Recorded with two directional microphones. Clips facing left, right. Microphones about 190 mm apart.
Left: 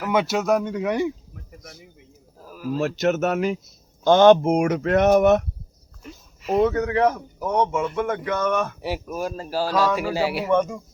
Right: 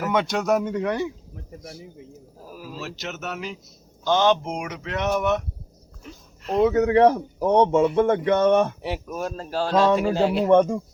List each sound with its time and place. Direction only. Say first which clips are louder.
0.1 s speech: left 2 dB; 5° left (ahead or behind)
2.7 s speech: left 14 dB; 50° left (ahead or behind)
6.0 s a sound: left 1 dB; 5° left (ahead or behind)
6.7 s a man's voice: right 4 dB; 25° right (ahead or behind)
8.8 s a man's voice: left 1 dB; 5° left (ahead or behind)
10.5 s a man's voice: right 5 dB; 30° right (ahead or behind)